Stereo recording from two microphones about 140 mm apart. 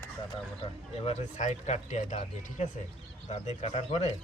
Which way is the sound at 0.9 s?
50° left (ahead or behind).